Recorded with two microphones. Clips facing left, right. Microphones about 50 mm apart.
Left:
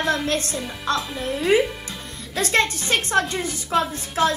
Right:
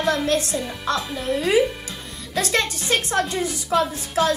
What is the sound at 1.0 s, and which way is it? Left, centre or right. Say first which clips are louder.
Speech: right 1 dB; centre.